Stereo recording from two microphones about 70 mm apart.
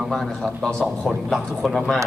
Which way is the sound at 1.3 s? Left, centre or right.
Centre.